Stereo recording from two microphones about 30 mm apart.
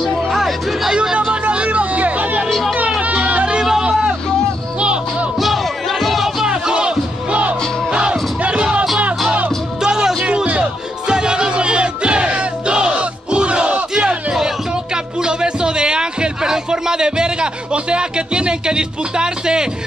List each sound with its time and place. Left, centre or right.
1.1 s a sound: right
1.5 s music: right
5.4 s music: centre
6.4 s music: right
9.8 s music: right
10.2 s music: right
11.1 s music: right
12.3 s music: right
15.2 s a sound: right